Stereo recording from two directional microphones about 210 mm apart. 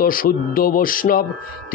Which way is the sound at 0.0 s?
40° left (ahead or behind).